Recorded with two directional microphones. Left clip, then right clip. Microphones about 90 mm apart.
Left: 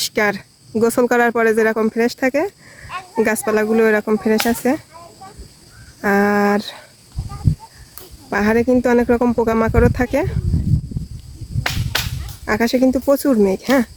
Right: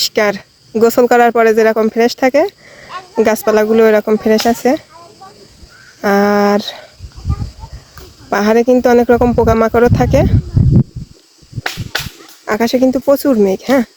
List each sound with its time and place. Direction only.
0.0 s speech: 5° right (ahead or behind)
6.0 s speech: 15° right (ahead or behind)
8.3 s speech: 15° right (ahead or behind)
11.6 s whip: 20° right (ahead or behind)
12.5 s speech: 15° right (ahead or behind)